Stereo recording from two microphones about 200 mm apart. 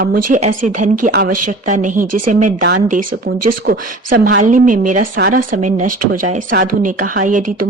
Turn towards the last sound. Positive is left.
turn(degrees=-45)  # may be behind; listen again after turning